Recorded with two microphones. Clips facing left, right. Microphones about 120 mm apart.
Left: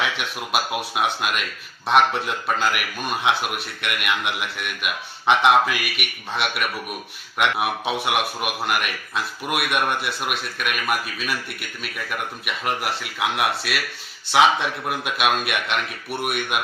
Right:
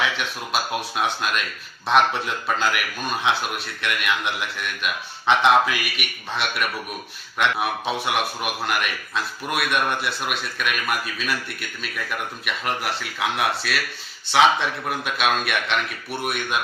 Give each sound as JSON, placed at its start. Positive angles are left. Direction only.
{"t": 0.2, "sound": "a man's voice", "side_deg": 10}